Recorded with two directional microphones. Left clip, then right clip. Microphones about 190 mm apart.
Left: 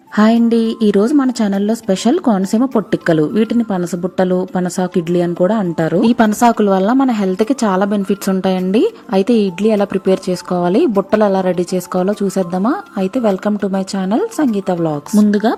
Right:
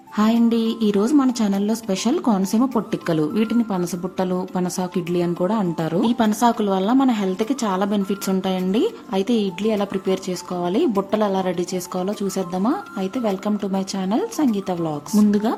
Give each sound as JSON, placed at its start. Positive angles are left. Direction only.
{"t": 0.4, "sound": "a woman's voice", "side_deg": 30}